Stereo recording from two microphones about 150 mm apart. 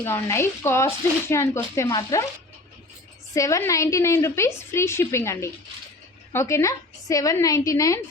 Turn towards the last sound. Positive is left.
turn(degrees=20)  # may be behind; listen again after turning